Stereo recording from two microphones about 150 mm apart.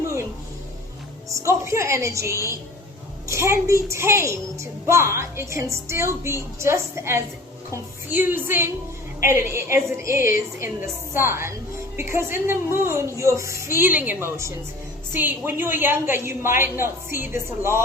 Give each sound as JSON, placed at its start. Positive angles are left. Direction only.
{"t": 1.4, "sound": "a woman's voice", "side_deg": -20}